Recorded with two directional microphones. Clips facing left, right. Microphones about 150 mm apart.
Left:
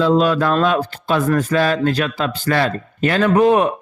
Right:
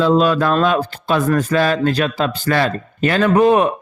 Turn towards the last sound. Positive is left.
turn(degrees=-30)  # may be behind; listen again after turning